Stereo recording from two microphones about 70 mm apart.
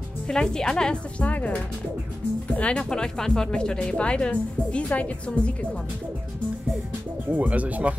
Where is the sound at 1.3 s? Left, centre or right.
Left.